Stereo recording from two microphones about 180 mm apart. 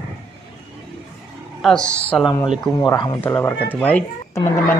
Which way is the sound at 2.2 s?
25° left (ahead or behind).